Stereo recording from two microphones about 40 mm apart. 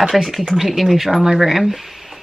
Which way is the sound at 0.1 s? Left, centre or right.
Centre.